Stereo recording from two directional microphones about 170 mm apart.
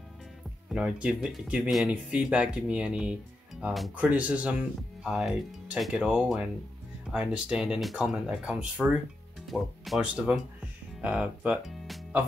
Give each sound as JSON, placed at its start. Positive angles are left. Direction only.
{"t": 0.7, "sound": "speech", "side_deg": -5}